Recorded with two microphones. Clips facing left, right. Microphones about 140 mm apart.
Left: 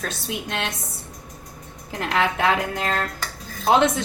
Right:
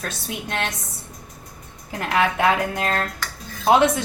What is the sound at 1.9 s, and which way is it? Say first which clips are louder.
A woman's voice: right 1 dB; 5° right (ahead or behind).